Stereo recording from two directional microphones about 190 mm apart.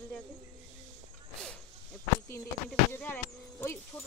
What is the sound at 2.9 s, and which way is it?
Speech, 10° left (ahead or behind).